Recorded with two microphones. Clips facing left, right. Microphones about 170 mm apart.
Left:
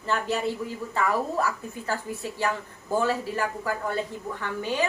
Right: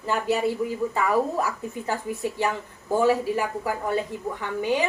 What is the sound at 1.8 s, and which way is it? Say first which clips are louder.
A woman's voice: right 3 dB; 15° right (ahead or behind).